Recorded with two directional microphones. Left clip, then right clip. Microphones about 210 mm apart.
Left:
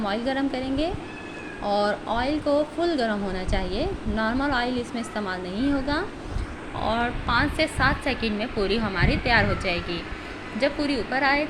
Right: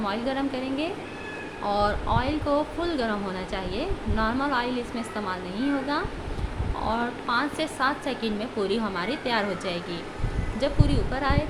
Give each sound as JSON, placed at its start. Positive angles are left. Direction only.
{"t": 0.0, "sound": "speech", "side_deg": 10}
{"t": 6.8, "sound": "a woman's voice", "side_deg": 0}